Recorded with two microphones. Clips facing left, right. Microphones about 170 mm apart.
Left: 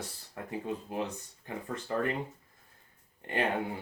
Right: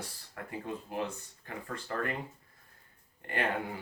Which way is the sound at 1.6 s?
20° left (ahead or behind).